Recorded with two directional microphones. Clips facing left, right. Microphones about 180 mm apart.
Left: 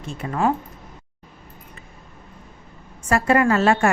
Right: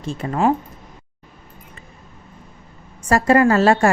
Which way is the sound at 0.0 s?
35° right (ahead or behind).